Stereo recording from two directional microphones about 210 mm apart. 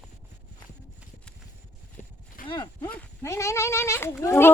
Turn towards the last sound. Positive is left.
turn(degrees=10)  # may be behind; listen again after turning